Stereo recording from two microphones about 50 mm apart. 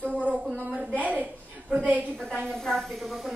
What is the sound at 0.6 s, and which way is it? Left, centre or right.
A woman's voice, right.